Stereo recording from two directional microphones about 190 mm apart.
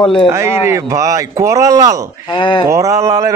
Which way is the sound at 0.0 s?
25° left (ahead or behind).